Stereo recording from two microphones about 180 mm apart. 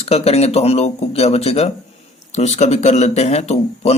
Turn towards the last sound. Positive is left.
turn(degrees=35)  # may be behind; listen again after turning